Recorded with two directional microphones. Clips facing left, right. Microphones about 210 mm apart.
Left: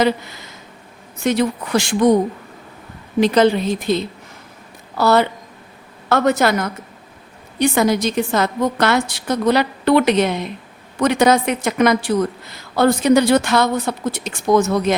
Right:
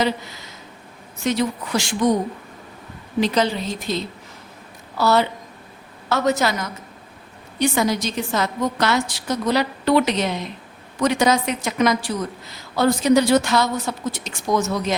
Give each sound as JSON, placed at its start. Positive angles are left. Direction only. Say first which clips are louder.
{"t": 1.2, "sound": "a woman's voice", "louder": "left 4 dB", "side_deg": 55}
{"t": 3.2, "sound": "a woman's voice", "louder": "left 6 dB", "side_deg": 55}